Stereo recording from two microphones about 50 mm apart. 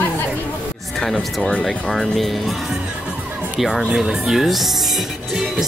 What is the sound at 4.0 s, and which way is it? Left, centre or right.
Speech, centre.